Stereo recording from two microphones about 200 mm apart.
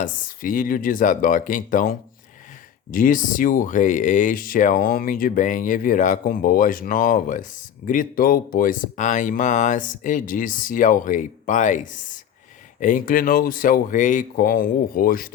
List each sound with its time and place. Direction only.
0.0 s speech: 45° left (ahead or behind)